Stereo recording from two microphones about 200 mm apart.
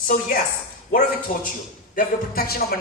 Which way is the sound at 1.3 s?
40° left (ahead or behind).